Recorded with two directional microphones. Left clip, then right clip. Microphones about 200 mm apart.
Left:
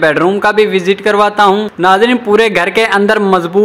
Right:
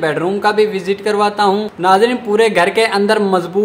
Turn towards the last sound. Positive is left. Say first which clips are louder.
# left 4 dB
turn(degrees=25)  # may be behind; listen again after turning